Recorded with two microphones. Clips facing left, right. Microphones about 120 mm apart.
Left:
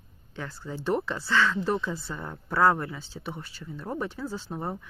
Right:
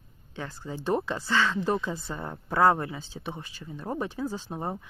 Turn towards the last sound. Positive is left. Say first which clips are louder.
# right 1 dB
turn(degrees=-20)  # may be behind; listen again after turning